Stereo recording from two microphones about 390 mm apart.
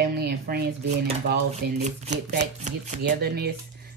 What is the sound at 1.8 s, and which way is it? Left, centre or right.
Speech, right.